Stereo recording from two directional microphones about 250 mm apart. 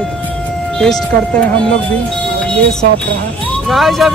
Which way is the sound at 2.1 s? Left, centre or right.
Centre.